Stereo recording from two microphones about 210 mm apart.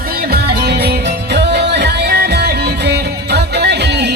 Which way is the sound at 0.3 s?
50° right (ahead or behind).